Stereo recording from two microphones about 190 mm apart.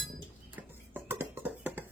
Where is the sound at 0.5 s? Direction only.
10° right (ahead or behind).